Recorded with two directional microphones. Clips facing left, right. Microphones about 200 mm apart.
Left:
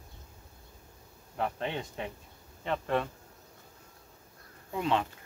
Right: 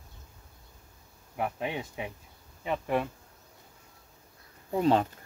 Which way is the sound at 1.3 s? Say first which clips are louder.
Right 1 dB; 10° right (ahead or behind).